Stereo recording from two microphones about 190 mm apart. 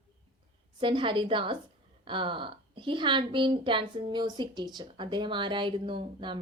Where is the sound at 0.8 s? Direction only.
25° right (ahead or behind).